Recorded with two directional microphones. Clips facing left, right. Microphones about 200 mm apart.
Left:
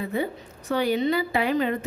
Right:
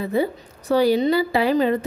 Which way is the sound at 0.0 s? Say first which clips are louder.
Right 5 dB; 35° right (ahead or behind).